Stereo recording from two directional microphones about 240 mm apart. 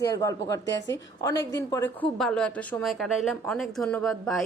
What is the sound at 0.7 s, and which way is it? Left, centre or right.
Speech, left.